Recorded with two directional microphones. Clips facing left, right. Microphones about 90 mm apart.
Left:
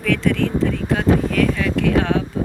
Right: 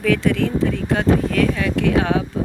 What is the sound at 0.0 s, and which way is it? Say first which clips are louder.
Speech: right 1 dB; 5° right (ahead or behind).